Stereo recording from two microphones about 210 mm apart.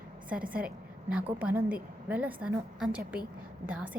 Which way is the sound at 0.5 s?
5° right (ahead or behind).